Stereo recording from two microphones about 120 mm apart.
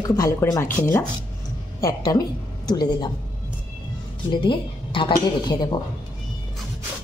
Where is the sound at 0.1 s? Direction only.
30° left (ahead or behind).